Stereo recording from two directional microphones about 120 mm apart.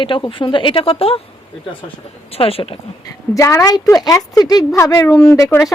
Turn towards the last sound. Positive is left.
turn(degrees=20)  # may be behind; listen again after turning